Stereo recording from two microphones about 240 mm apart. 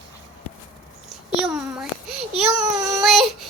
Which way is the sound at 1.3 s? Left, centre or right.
Centre.